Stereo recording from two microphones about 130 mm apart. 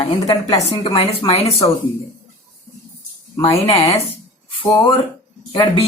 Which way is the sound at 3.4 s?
45° left (ahead or behind).